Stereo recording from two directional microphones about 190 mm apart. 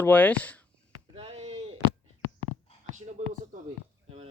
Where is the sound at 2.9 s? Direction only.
40° right (ahead or behind).